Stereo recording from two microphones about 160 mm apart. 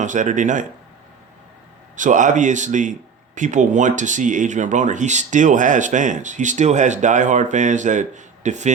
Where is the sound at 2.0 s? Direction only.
50° right (ahead or behind).